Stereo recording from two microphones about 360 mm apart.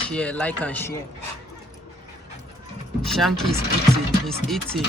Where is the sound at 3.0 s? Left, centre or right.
Centre.